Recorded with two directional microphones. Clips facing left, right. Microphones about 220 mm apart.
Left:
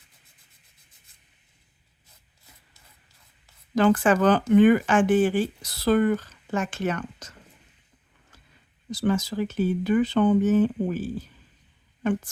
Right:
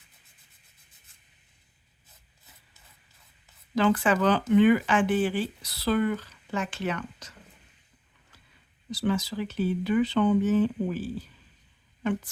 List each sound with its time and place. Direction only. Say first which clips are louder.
3.8 s speech: left 4 dB; 45° left (ahead or behind)
8.9 s speech: left 3 dB; 45° left (ahead or behind)